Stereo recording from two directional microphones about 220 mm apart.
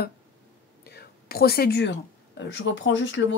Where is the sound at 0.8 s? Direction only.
45° left (ahead or behind).